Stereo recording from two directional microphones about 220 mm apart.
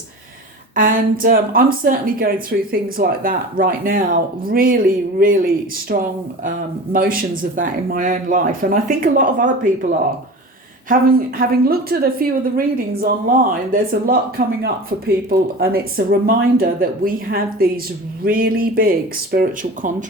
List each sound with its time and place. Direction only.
0.8 s a woman's voice: 40° right (ahead or behind)
10.8 s a woman's voice: 40° right (ahead or behind)